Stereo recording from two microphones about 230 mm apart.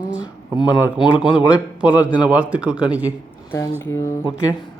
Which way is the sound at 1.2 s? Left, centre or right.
Centre.